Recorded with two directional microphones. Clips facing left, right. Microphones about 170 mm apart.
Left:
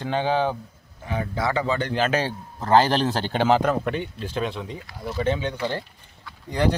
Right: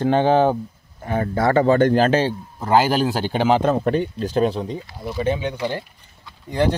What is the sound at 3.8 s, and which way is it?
Speech, 40° right (ahead or behind).